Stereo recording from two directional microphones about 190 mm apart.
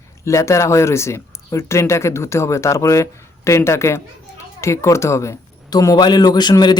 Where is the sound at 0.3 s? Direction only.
15° left (ahead or behind).